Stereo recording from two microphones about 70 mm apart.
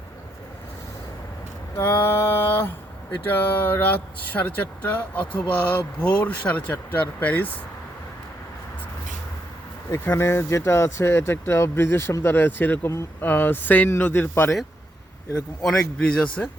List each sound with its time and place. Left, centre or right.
1.7 s a sound: left
3.2 s speech: left
9.9 s speech: left
15.6 s a man's voice: centre